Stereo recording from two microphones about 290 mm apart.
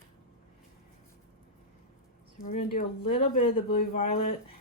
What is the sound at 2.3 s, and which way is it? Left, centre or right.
Speech, left.